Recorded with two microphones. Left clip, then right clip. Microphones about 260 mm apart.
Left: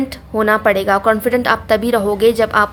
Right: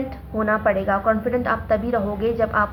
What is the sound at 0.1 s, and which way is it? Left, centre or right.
A woman's voice, left.